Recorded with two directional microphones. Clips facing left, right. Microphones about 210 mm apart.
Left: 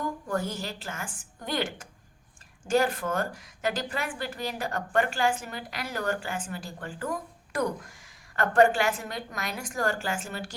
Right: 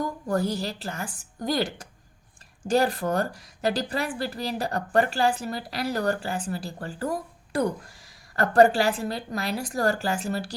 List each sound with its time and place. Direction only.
0.0 s a woman's voice: 35° right (ahead or behind)